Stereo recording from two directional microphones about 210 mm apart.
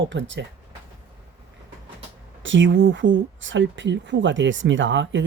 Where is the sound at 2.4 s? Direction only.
60° right (ahead or behind).